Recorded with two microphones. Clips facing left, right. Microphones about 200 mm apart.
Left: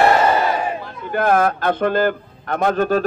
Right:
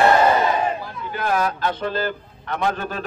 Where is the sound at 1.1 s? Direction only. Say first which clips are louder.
Left 6 dB; 55° left (ahead or behind).